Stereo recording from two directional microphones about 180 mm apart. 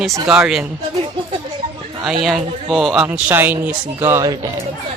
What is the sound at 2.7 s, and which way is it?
Speech, centre (ahead or behind).